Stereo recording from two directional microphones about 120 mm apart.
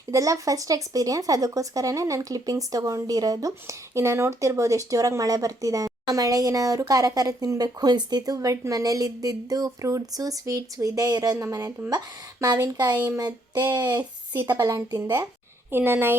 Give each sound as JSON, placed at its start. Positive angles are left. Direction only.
{"t": 0.1, "sound": "speech", "side_deg": -25}
{"t": 15.7, "sound": "a woman's voice", "side_deg": -20}